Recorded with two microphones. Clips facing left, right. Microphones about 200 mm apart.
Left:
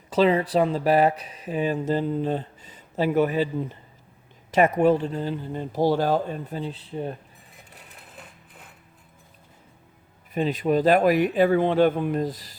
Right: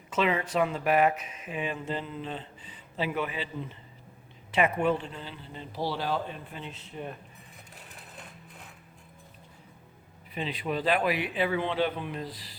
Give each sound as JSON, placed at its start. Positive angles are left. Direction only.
{"t": 0.1, "sound": "speech", "side_deg": 35}
{"t": 8.1, "sound": "sewing machine", "side_deg": 5}
{"t": 10.3, "sound": "speech", "side_deg": 45}